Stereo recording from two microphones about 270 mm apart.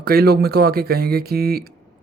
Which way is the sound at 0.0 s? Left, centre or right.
Right.